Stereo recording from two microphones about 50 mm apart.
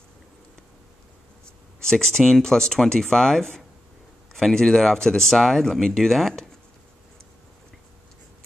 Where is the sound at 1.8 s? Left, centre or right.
Centre.